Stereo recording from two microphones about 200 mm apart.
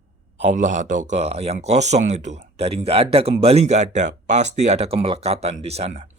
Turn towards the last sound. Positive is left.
turn(degrees=-30)  # may be behind; listen again after turning